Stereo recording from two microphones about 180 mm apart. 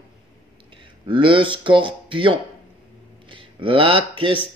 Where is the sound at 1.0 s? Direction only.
25° right (ahead or behind).